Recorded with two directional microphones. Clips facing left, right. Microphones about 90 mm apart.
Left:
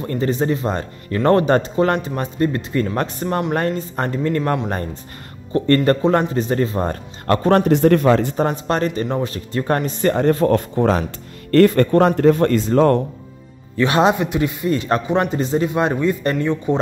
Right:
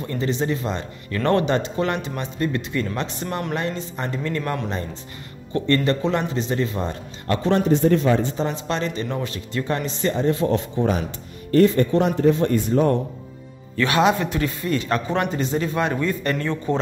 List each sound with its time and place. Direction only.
0.0 s speech: 40° left (ahead or behind); by 8.4 s 70° left (ahead or behind)
8.4 s speech: 45° left (ahead or behind)
9.7 s speech: 50° left (ahead or behind)
11.5 s speech: 65° left (ahead or behind)
13.7 s a man's voice: 25° left (ahead or behind)
14.1 s a man's voice: 15° left (ahead or behind)